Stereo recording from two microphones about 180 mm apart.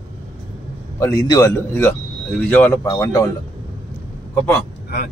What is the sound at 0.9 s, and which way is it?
A man's voice, 15° left (ahead or behind).